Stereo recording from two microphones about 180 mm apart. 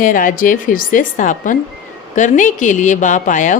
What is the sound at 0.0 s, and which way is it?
Speech, 50° left (ahead or behind).